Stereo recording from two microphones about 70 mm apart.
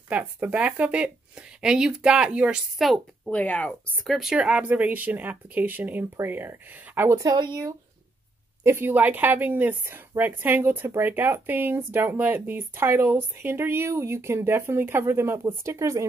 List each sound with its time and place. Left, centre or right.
0.1 s a woman's voice: right
3.3 s speech: centre
4.0 s speech: centre
4.4 s a woman's voice: centre
8.6 s a woman's voice: right